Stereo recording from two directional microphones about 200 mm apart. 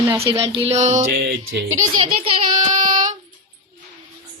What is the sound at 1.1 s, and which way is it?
Music, 50° right (ahead or behind).